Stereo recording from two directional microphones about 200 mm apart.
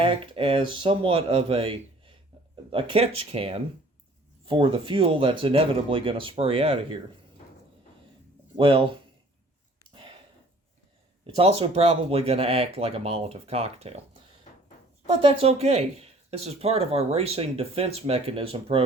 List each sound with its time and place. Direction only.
0.0 s speech: 25° right (ahead or behind)
8.5 s speech: 25° right (ahead or behind)
11.3 s speech: 30° right (ahead or behind)
15.2 s speech: 30° right (ahead or behind)